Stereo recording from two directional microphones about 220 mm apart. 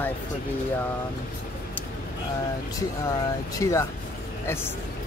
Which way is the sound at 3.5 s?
15° left (ahead or behind).